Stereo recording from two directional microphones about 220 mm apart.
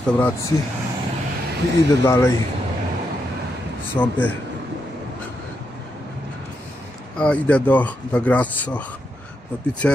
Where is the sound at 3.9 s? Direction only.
5° left (ahead or behind).